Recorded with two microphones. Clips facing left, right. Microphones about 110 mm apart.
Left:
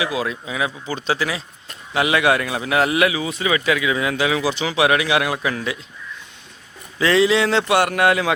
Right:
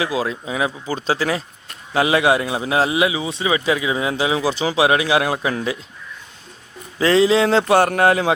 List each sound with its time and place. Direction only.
0.0 s a man's voice: 30° right (ahead or behind)
4.4 s speech: 40° right (ahead or behind)
4.7 s a man's voice: 30° right (ahead or behind)
7.0 s speech: 35° right (ahead or behind)